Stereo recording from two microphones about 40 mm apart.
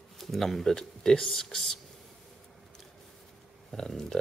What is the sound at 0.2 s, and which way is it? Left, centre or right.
Speech, centre.